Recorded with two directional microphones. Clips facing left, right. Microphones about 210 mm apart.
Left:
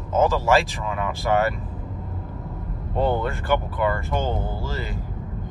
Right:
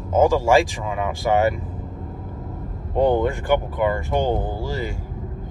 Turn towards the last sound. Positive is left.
turn(degrees=-15)  # may be behind; listen again after turning